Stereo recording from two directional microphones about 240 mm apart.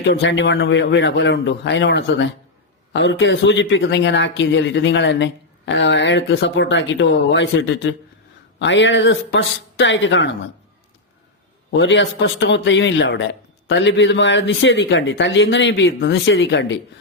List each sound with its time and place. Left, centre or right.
0.0 s speech: left
11.7 s speech: left